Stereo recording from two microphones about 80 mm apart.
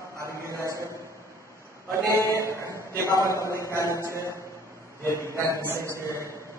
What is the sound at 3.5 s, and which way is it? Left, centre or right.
Speech, right.